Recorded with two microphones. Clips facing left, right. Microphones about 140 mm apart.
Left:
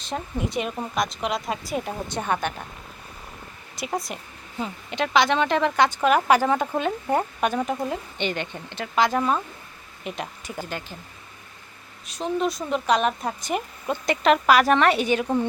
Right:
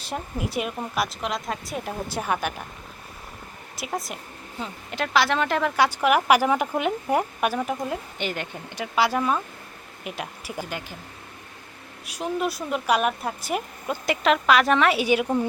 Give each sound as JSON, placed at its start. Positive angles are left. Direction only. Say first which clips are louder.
{"t": 0.0, "sound": "speech", "louder": "left 1 dB", "side_deg": -5}
{"t": 3.8, "sound": "speech", "louder": "left 2 dB", "side_deg": 0}
{"t": 12.0, "sound": "speech", "louder": "left 2 dB", "side_deg": -10}